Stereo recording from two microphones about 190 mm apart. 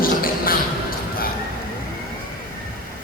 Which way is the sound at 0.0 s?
50° left (ahead or behind).